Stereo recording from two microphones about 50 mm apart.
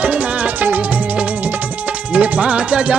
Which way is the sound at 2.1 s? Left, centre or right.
Right.